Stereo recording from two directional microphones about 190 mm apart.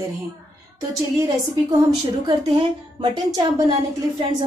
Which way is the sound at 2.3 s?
25° right (ahead or behind).